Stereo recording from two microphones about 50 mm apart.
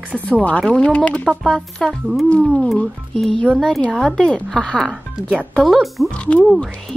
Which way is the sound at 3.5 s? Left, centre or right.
Centre.